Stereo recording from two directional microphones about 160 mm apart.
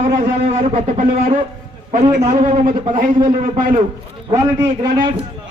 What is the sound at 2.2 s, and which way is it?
A man's voice, 45° right (ahead or behind).